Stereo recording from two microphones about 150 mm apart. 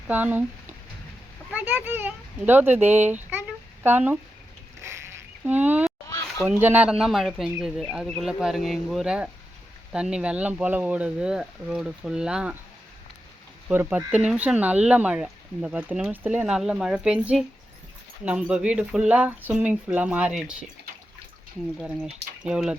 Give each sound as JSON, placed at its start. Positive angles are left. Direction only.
{"t": 0.1, "sound": "speech", "side_deg": -10}
{"t": 4.8, "sound": "a sound", "side_deg": -15}
{"t": 6.1, "sound": "a sound", "side_deg": 20}
{"t": 6.6, "sound": "speech", "side_deg": -10}
{"t": 13.7, "sound": "speech", "side_deg": -10}
{"t": 21.8, "sound": "speech", "side_deg": -5}